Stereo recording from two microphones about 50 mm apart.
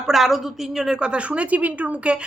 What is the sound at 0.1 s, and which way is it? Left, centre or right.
Speech, centre.